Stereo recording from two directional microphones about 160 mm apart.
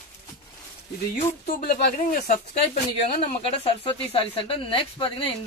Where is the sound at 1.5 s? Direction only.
70° left (ahead or behind).